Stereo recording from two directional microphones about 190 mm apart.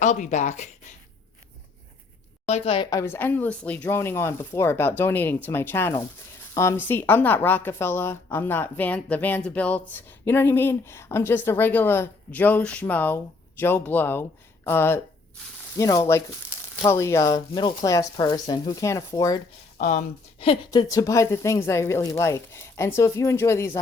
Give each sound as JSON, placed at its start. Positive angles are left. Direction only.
{"t": 0.0, "sound": "speech", "side_deg": 40}
{"t": 2.5, "sound": "a woman's voice", "side_deg": 30}
{"t": 19.8, "sound": "speech", "side_deg": 40}
{"t": 20.4, "sound": "a woman's voice", "side_deg": 25}